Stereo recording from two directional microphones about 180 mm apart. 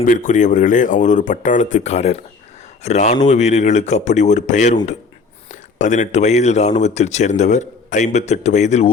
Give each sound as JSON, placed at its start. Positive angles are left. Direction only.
{"t": 0.0, "sound": "speech", "side_deg": 45}